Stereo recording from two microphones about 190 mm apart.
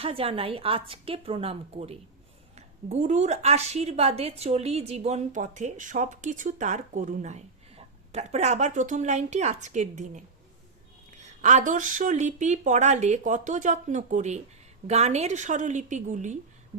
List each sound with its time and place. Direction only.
0.0 s a woman's voice: 30° right (ahead or behind)